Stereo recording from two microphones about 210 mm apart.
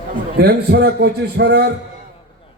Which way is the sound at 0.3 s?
45° right (ahead or behind).